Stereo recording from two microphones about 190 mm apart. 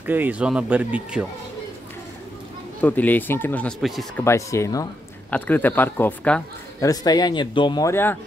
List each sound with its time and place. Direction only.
0.0 s speech: 10° right (ahead or behind)
2.8 s speech: 10° left (ahead or behind)
4.2 s speech: 15° left (ahead or behind)
6.8 s speech: 20° left (ahead or behind)